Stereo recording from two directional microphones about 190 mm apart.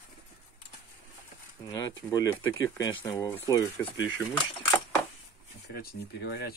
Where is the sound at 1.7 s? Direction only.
20° left (ahead or behind).